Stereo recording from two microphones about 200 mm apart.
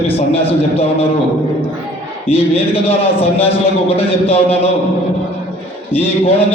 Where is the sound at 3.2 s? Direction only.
30° left (ahead or behind).